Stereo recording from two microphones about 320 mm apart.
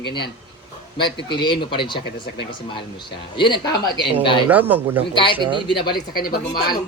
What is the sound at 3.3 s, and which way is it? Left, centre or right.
A woman's voice, centre.